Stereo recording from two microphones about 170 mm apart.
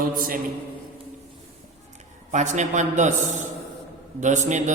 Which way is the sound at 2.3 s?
45° right (ahead or behind).